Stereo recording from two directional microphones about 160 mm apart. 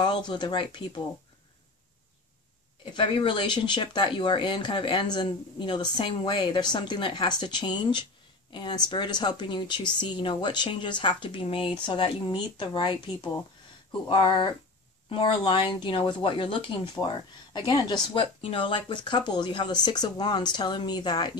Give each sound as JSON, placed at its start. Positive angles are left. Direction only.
{"t": 0.0, "sound": "speech", "side_deg": 30}
{"t": 2.8, "sound": "speech", "side_deg": 30}